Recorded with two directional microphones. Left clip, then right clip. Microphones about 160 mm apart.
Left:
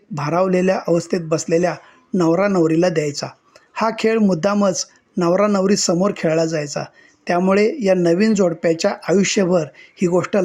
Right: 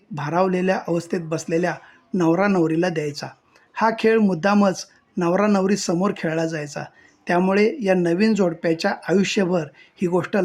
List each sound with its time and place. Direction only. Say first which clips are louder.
0.1 s speech: left 3 dB; 15° left (ahead or behind)